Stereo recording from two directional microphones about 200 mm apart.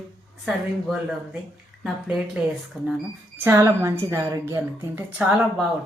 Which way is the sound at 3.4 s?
15° right (ahead or behind).